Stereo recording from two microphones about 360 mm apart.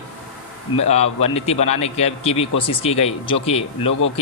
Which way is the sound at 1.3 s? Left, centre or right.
Centre.